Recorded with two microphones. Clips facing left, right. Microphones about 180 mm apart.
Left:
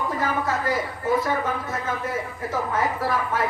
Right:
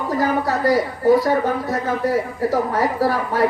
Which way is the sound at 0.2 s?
35° right (ahead or behind).